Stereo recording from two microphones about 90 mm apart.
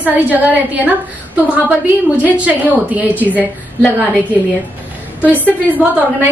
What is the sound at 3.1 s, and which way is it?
Speech, 20° left (ahead or behind).